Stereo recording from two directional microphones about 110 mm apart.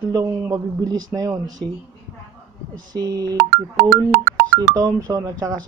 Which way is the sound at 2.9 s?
35° right (ahead or behind).